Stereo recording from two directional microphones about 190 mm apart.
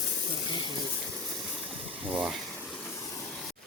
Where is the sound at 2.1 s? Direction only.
5° right (ahead or behind).